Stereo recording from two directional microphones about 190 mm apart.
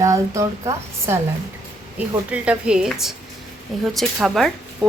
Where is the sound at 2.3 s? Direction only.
5° right (ahead or behind).